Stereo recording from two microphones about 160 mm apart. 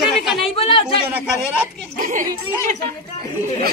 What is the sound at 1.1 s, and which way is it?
Speech, 10° right (ahead or behind).